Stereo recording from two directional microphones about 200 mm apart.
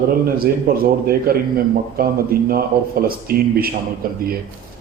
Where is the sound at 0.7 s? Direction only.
50° right (ahead or behind).